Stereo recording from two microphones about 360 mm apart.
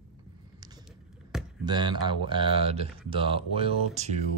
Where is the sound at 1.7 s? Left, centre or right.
Centre.